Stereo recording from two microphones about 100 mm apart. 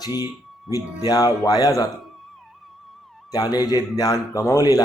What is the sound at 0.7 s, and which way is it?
Speech, 40° left (ahead or behind).